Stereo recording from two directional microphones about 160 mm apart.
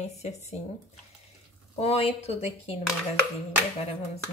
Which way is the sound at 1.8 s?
40° left (ahead or behind).